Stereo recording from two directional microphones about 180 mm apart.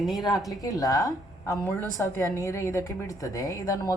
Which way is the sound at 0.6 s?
20° left (ahead or behind).